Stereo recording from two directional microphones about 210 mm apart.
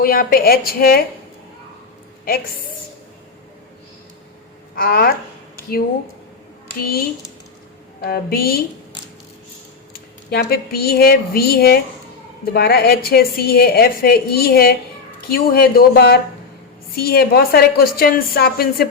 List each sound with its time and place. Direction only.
0.0 s a woman's voice: 45° left (ahead or behind)
4.7 s speech: 45° left (ahead or behind)
6.8 s a woman's voice: 45° left (ahead or behind)
10.2 s a woman's voice: 45° left (ahead or behind)